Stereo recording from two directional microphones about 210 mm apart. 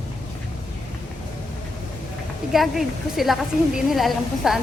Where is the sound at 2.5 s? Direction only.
Centre (ahead or behind).